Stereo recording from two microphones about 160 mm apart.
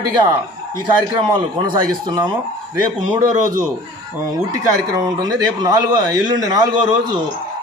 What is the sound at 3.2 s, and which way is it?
Speech, 55° right (ahead or behind).